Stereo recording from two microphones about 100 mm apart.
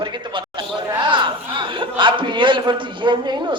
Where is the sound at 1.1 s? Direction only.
55° right (ahead or behind).